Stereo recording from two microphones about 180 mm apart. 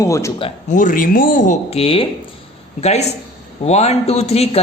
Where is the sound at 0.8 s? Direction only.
45° left (ahead or behind); by 2.1 s 30° left (ahead or behind).